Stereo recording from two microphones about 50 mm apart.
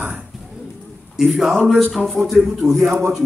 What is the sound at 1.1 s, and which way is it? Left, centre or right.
A man's voice, centre.